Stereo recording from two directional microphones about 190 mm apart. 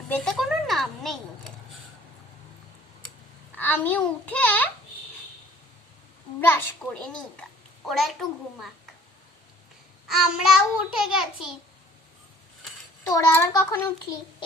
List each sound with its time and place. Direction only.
0.1 s a sound: centre (ahead or behind)
3.6 s a child's voice: 10° left (ahead or behind)
6.5 s a child's voice: 10° left (ahead or behind)
10.1 s a child's voice: centre (ahead or behind)
13.1 s a child's voice: 15° left (ahead or behind)